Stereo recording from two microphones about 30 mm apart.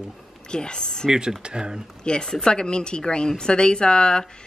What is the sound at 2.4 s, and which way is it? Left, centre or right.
Speech, left.